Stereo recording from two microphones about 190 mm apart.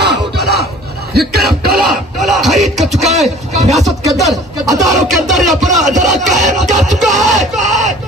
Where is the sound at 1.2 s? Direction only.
55° right (ahead or behind).